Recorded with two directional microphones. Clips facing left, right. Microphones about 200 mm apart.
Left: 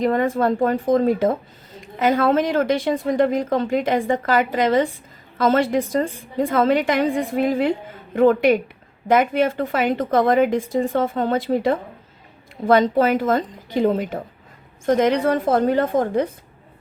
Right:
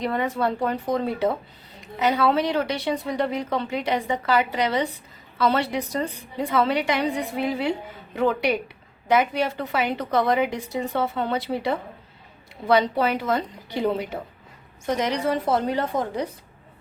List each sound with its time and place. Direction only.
0.0 s a woman's voice: 45° left (ahead or behind)